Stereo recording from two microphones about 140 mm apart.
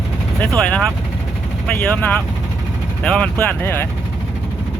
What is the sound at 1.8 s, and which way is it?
Speech, 10° left (ahead or behind).